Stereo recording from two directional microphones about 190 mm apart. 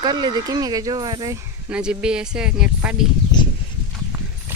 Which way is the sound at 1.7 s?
5° right (ahead or behind).